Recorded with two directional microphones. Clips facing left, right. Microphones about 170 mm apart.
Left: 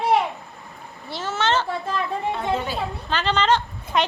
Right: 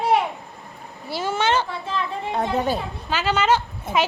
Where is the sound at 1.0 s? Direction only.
10° right (ahead or behind).